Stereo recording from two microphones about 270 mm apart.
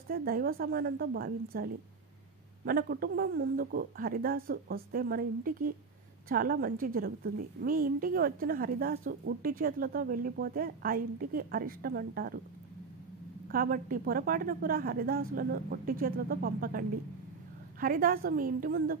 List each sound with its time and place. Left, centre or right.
0.1 s a woman's voice: right
13.5 s a woman's voice: right